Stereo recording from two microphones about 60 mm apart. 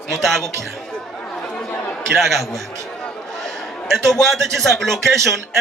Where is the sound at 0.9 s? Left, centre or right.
Centre.